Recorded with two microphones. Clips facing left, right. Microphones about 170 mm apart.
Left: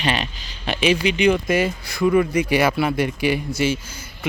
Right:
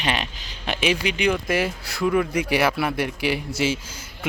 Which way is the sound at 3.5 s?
90° right.